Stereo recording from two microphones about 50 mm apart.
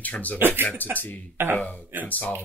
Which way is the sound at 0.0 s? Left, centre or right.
Left.